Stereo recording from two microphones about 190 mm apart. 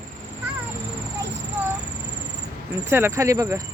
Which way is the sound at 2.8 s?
10° right (ahead or behind).